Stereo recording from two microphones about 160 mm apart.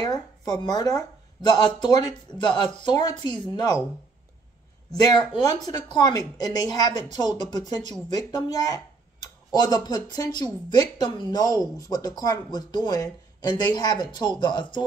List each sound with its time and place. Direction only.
0.0 s speech: 25° left (ahead or behind)
4.9 s speech: 25° left (ahead or behind)